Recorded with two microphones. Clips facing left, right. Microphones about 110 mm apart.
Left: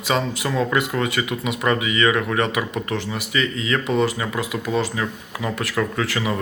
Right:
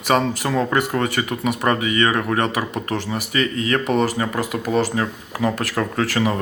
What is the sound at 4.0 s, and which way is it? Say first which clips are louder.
Speech: right 1 dB; 40° right (ahead or behind).